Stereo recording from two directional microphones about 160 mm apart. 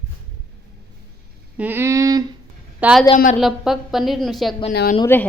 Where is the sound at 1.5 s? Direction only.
10° right (ahead or behind).